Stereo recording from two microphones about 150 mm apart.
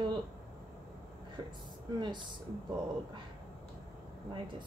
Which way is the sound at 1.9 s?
30° right (ahead or behind).